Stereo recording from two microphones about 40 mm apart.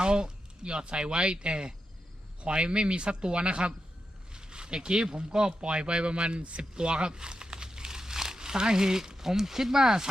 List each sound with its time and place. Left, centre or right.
0.0 s speech: right